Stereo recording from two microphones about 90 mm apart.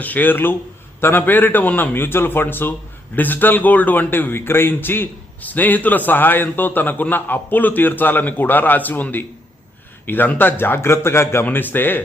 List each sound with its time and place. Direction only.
0.0 s a man's voice: 20° left (ahead or behind)